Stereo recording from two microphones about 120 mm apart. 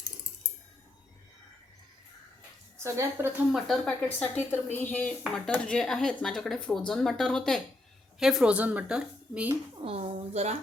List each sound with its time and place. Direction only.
2.7 s a woman's voice: 25° right (ahead or behind)
3.5 s a woman's voice: 5° left (ahead or behind); by 9.6 s 10° right (ahead or behind)
9.8 s a woman's voice: 60° right (ahead or behind)